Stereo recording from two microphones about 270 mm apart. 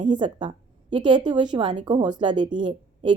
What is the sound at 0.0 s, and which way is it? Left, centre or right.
Speech, centre.